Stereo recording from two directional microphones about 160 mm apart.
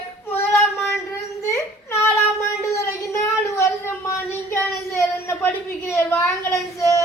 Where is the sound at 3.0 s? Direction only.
15° left (ahead or behind).